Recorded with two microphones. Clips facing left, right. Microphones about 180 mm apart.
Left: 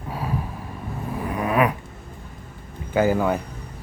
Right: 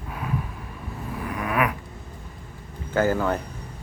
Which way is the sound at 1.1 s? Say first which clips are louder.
Left 4 dB; 30° left (ahead or behind).